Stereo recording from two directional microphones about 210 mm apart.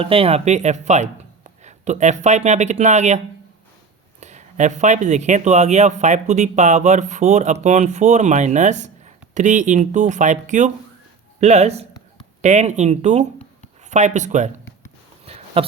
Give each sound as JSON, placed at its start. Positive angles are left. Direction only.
{"t": 0.0, "sound": "speech", "side_deg": -25}
{"t": 4.2, "sound": "speech", "side_deg": -35}
{"t": 15.3, "sound": "a sound", "side_deg": -30}